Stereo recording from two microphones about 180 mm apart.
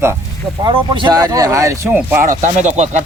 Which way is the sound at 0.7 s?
25° right (ahead or behind).